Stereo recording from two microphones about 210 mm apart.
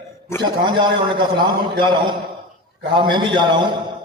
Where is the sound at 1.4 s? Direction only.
20° right (ahead or behind).